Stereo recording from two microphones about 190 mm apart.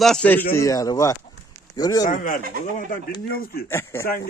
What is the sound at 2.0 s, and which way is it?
Speech, 45° left (ahead or behind).